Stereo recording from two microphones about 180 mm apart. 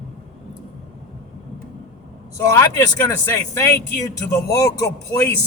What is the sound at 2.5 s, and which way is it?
Speech, 20° left (ahead or behind).